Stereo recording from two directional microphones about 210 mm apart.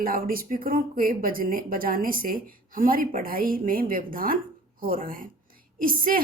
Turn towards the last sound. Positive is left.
turn(degrees=-40)  # may be behind; listen again after turning